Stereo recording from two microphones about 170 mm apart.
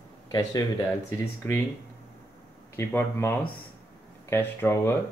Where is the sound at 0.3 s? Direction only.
20° left (ahead or behind).